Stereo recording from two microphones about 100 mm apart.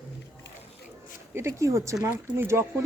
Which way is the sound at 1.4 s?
30° right (ahead or behind).